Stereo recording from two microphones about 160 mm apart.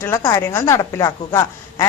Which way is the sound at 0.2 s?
20° left (ahead or behind).